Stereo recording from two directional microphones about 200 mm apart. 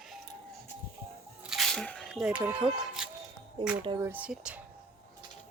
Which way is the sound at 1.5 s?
Centre (ahead or behind).